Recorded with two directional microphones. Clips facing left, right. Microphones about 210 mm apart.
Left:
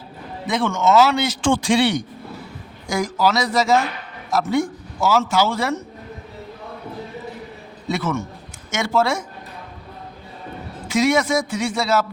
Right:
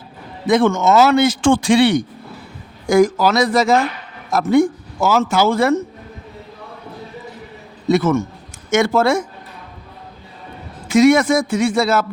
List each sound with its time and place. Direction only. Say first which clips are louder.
0.5 s speech: right 4 dB; 45° right (ahead or behind)
7.9 s speech: right 8 dB; 45° right (ahead or behind)
10.8 s speech: right 7 dB; 50° right (ahead or behind)